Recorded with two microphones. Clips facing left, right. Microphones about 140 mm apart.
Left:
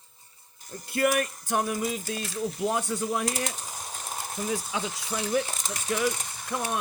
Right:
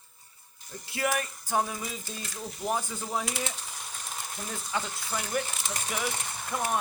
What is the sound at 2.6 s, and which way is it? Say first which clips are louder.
Speech: left 2 dB; 90° left.